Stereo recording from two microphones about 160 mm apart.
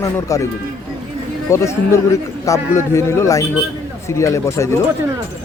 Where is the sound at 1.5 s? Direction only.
20° left (ahead or behind).